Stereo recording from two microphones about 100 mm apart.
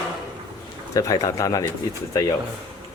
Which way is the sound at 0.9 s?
35° left (ahead or behind).